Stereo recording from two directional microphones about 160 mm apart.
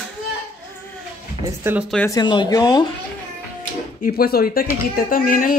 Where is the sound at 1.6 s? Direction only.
15° right (ahead or behind).